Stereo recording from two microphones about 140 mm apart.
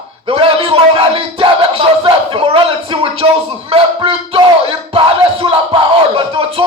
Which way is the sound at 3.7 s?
40° right (ahead or behind).